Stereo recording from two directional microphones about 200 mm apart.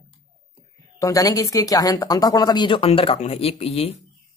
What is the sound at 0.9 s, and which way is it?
A woman's voice, 15° left (ahead or behind).